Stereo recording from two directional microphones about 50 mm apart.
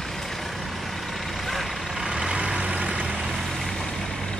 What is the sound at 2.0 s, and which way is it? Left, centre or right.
Vehicle, centre.